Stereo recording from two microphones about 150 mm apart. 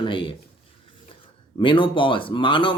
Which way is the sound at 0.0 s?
35° left (ahead or behind).